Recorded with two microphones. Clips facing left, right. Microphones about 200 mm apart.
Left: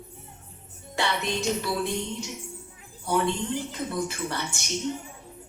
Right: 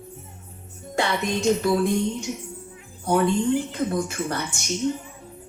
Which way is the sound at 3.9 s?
45° right (ahead or behind).